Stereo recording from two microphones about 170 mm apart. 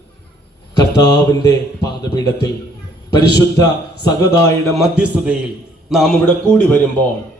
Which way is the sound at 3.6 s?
20° left (ahead or behind).